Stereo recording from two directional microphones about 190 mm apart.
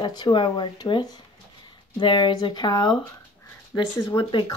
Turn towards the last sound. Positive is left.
turn(degrees=25)  # may be behind; listen again after turning